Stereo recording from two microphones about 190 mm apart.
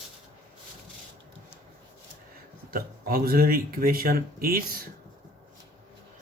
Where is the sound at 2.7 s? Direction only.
50° right (ahead or behind).